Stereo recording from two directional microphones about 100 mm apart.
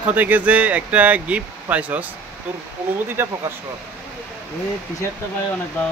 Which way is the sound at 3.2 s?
25° right (ahead or behind).